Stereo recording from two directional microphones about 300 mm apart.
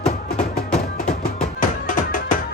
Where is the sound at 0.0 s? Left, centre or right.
Left.